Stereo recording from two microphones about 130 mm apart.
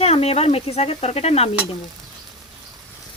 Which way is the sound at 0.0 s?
50° left (ahead or behind).